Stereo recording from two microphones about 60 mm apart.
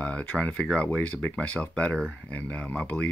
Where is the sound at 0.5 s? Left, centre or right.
Centre.